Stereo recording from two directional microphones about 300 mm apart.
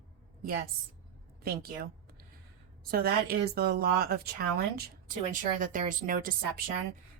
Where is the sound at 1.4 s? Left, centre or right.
Right.